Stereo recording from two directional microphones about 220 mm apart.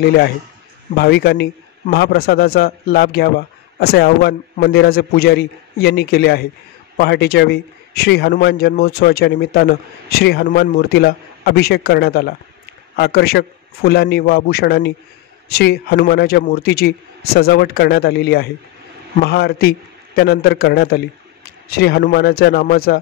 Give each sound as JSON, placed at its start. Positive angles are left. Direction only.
{"t": 0.0, "sound": "a man's voice", "side_deg": 50}